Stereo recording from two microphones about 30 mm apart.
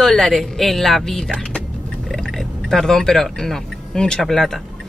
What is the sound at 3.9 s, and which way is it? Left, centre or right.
Speech, left.